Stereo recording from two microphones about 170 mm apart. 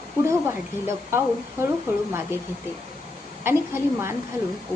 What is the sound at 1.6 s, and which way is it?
Speech, 15° right (ahead or behind).